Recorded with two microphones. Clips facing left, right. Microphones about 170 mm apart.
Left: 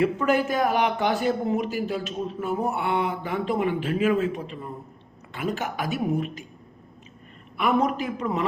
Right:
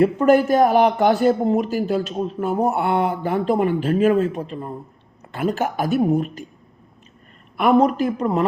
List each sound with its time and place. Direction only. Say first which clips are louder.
0.0 s speech: right 7 dB; 40° right (ahead or behind)
7.5 s a man's voice: right 7 dB; 40° right (ahead or behind)